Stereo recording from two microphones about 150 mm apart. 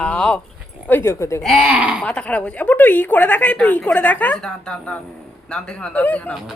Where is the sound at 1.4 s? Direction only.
Centre (ahead or behind).